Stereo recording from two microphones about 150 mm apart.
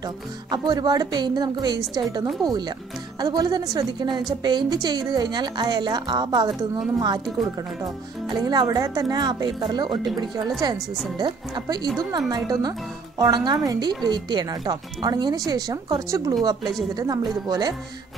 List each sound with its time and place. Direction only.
0.0 s speech: 25° right (ahead or behind)
7.8 s speech: 25° right (ahead or behind)